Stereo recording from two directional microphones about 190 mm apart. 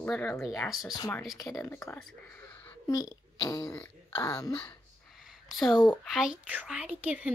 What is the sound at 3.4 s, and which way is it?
Speech, 20° left (ahead or behind).